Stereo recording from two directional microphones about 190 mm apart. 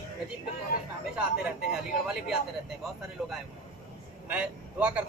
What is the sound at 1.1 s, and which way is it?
Speech, 5° right (ahead or behind).